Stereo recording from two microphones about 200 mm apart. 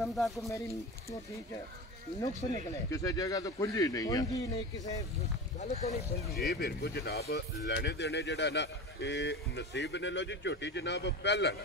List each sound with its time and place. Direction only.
0.0 s speech: centre (ahead or behind)
0.5 s speech: 15° left (ahead or behind)
2.2 s speech: 15° left (ahead or behind)
5.6 s speech: 35° left (ahead or behind)
6.3 s speech: 55° left (ahead or behind)